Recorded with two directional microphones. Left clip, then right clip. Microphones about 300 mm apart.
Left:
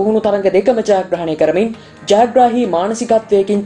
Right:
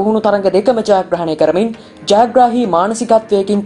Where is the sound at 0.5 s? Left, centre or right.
Centre.